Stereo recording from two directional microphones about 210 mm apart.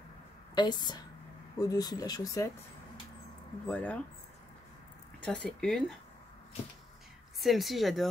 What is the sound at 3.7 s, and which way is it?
Speech, 5° left (ahead or behind).